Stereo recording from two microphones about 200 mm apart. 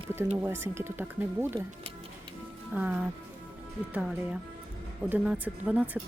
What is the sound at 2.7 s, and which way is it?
Speech, 5° right (ahead or behind).